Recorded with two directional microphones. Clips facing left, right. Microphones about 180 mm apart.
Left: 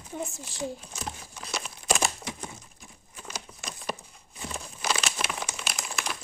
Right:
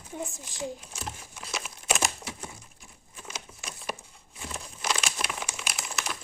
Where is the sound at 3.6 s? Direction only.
5° right (ahead or behind).